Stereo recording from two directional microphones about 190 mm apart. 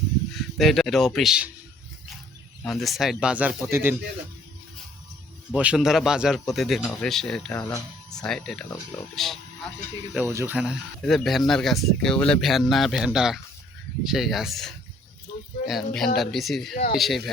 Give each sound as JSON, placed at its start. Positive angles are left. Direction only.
{"t": 0.5, "sound": "speech", "side_deg": 0}
{"t": 2.6, "sound": "speech", "side_deg": 0}
{"t": 5.5, "sound": "speech", "side_deg": -5}
{"t": 10.2, "sound": "speech", "side_deg": -10}
{"t": 11.0, "sound": "speech", "side_deg": 0}
{"t": 16.7, "sound": "speech", "side_deg": 50}
{"t": 17.0, "sound": "speech", "side_deg": 0}